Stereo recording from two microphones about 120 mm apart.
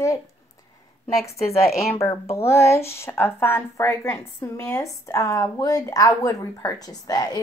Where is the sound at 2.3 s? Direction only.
20° left (ahead or behind).